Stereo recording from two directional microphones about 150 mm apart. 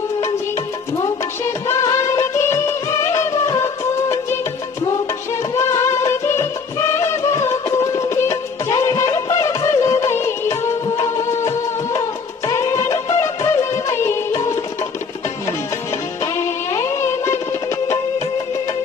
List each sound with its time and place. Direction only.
1.0 s music of bollywood: 20° left (ahead or behind)
5.5 s music: 20° left (ahead or behind)
12.4 s music of bollywood: 20° left (ahead or behind)
16.3 s music: 20° left (ahead or behind)